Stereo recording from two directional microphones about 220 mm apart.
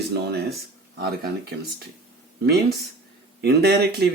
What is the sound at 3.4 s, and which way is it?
Speech, 45° right (ahead or behind).